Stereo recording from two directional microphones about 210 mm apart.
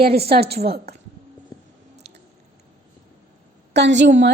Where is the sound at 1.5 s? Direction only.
15° left (ahead or behind).